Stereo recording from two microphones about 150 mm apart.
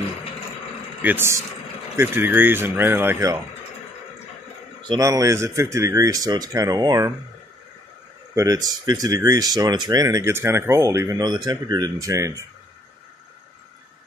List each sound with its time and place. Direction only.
1.0 s speech: 15° right (ahead or behind)
4.8 s speech: 25° right (ahead or behind)
8.4 s speech: 25° right (ahead or behind)